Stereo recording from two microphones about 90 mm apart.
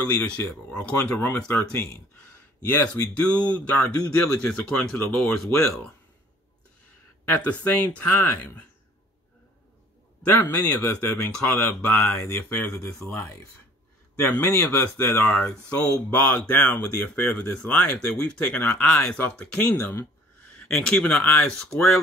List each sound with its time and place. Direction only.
0.1 s speech: 15° left (ahead or behind)
3.3 s speech: 15° left (ahead or behind)
4.9 s speech: 20° left (ahead or behind)
5.5 s speech: 30° left (ahead or behind)
7.2 s speech: 20° left (ahead or behind)
10.2 s speech: 20° left (ahead or behind)
14.4 s speech: 30° left (ahead or behind)
21.5 s speech: 5° left (ahead or behind)